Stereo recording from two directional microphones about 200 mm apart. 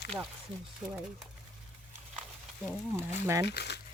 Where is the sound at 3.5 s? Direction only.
55° left (ahead or behind).